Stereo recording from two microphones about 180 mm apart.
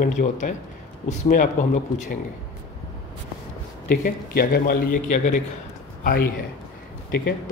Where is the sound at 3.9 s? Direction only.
55° left (ahead or behind).